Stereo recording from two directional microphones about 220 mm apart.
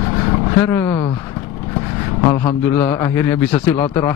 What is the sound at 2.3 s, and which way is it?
Speech, 25° left (ahead or behind).